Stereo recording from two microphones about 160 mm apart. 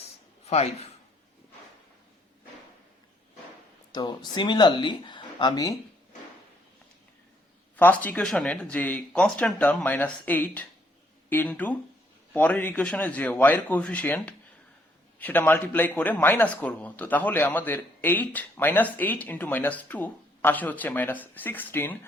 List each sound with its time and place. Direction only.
0.4 s speech: 40° left (ahead or behind)
3.9 s speech: 25° left (ahead or behind)
7.8 s a man's voice: 10° left (ahead or behind)